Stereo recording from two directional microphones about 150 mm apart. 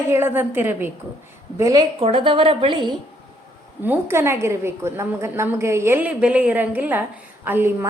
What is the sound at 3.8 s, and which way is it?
A woman's voice, 15° right (ahead or behind).